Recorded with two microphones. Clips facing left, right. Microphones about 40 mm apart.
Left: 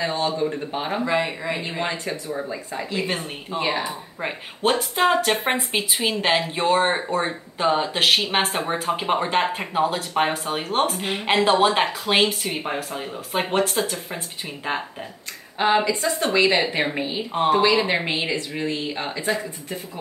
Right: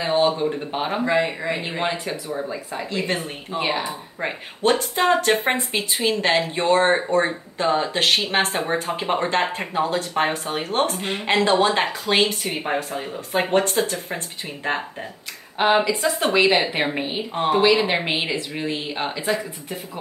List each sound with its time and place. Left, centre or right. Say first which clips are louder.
0.0 s a sound: right 4 dB; centre
0.7 s speech: right 1 dB; centre
1.9 s speech: right 1 dB; centre
2.5 s a woman's voice: even; centre
7.6 s a woman's voice: even; centre
12.4 s speech: right 2 dB; centre
12.9 s speech: right 2 dB; centre
16.2 s speech: right 1 dB; centre
16.5 s speech: right 1 dB; centre
17.3 s speech: left 2 dB; centre
17.6 s speech: right 1 dB; centre
18.7 s speech: right 1 dB; centre
19.2 s speech: right 1 dB; centre